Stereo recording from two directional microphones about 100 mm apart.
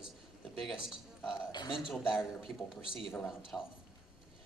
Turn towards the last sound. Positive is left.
turn(degrees=10)  # may be behind; listen again after turning